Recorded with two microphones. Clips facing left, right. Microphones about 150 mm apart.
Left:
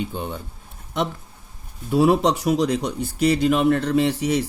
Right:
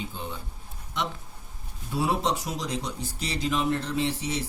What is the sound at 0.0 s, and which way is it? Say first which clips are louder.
Speech: left 8 dB; 60° left (ahead or behind).